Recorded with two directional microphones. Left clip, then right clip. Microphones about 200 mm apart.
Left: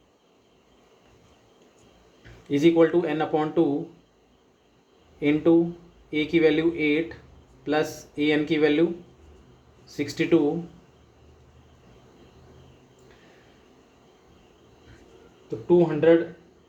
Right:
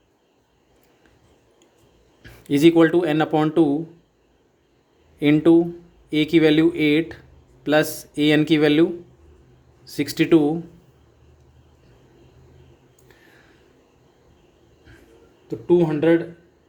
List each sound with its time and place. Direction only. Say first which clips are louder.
2.5 s speech: right 4 dB; 60° right (ahead or behind)
5.2 s speech: right 5 dB; 55° right (ahead or behind)
15.4 s speech: right 2 dB; 55° right (ahead or behind)